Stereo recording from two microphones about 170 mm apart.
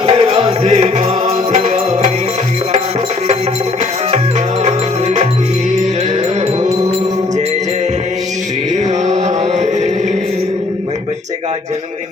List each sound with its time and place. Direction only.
0.0 s music: 30° right (ahead or behind)
4.6 s wind chime: 40° right (ahead or behind)
9.1 s chant: 45° right (ahead or behind)